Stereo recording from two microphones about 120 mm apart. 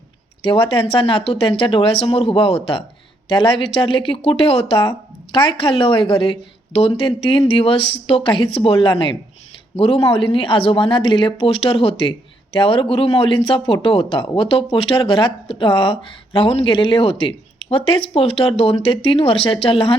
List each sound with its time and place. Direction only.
0.4 s speech: 50° left (ahead or behind)